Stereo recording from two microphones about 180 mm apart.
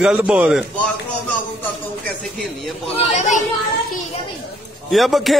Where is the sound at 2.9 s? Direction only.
40° left (ahead or behind).